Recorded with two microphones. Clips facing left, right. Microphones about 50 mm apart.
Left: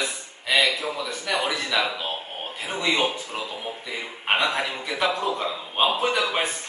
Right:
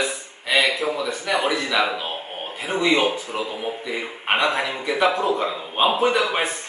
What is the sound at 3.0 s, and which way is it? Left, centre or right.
Speech, right.